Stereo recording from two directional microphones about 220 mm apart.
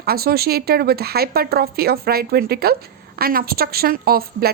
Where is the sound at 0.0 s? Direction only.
45° right (ahead or behind).